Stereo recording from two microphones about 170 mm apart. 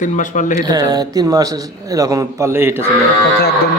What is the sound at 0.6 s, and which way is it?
A man's voice, 20° right (ahead or behind).